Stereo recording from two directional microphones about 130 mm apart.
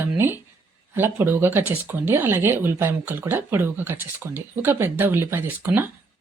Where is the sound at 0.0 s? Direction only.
15° right (ahead or behind).